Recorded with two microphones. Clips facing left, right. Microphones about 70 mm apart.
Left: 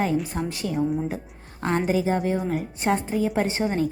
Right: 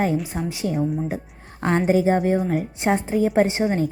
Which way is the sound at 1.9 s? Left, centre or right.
Right.